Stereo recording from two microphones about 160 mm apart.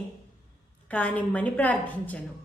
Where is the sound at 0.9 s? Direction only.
10° left (ahead or behind).